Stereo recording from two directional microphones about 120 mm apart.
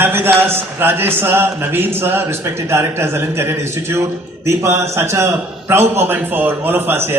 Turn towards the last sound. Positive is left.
turn(degrees=-20)  # may be behind; listen again after turning